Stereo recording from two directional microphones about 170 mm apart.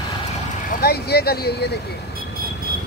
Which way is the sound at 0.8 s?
65° left (ahead or behind).